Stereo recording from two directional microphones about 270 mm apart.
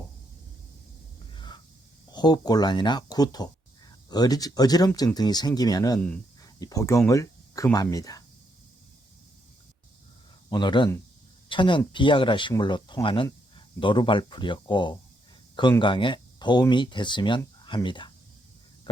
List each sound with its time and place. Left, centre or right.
1.3 s a sound: centre
2.1 s speech: centre
10.5 s speech: centre